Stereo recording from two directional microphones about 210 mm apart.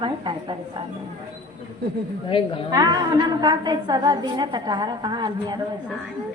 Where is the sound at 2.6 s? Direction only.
20° right (ahead or behind).